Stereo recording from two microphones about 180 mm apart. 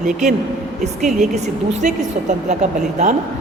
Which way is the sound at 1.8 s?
40° right (ahead or behind).